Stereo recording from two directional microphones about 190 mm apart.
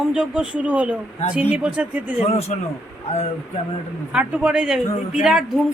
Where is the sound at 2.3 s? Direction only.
35° left (ahead or behind).